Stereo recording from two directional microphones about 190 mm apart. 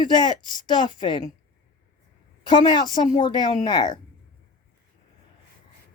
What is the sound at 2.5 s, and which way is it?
Speech, 25° left (ahead or behind).